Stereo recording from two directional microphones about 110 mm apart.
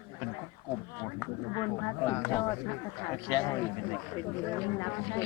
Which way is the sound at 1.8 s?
25° left (ahead or behind).